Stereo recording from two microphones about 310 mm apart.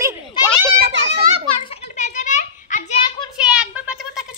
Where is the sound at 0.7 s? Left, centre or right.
Right.